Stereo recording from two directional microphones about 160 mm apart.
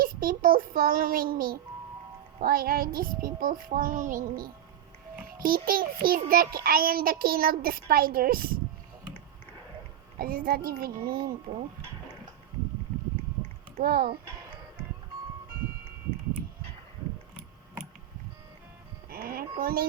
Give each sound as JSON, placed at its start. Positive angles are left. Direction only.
{"t": 0.0, "sound": "a child's voice", "side_deg": -65}
{"t": 10.2, "sound": "a child's voice", "side_deg": -65}
{"t": 13.7, "sound": "a child's voice", "side_deg": -70}
{"t": 19.0, "sound": "speech", "side_deg": -70}